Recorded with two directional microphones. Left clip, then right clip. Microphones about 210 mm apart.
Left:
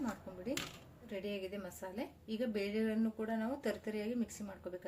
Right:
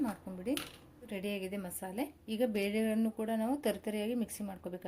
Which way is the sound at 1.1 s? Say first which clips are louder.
Right 3 dB; 40° right (ahead or behind).